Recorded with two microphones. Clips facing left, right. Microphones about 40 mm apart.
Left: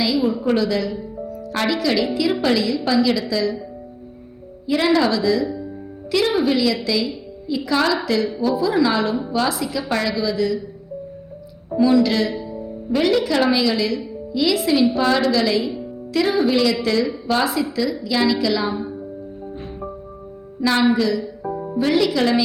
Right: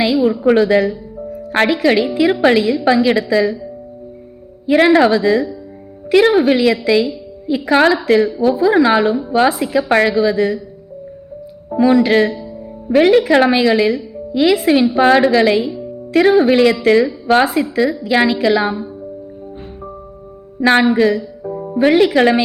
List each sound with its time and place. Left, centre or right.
0.0 s a sound: right
0.4 s a woman's voice: right
4.6 s a woman's voice: right
11.8 s a woman's voice: right
20.6 s a woman's voice: right